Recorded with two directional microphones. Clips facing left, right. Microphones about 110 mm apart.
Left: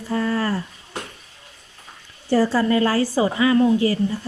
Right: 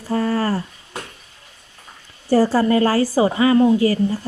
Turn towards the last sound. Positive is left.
turn(degrees=-30)  # may be behind; listen again after turning